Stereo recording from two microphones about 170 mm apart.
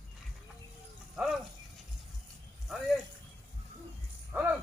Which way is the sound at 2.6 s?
Centre (ahead or behind).